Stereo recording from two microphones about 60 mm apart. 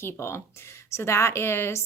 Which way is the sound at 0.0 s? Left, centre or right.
Left.